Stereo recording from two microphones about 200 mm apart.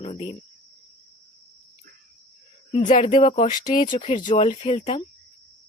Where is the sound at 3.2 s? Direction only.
30° left (ahead or behind).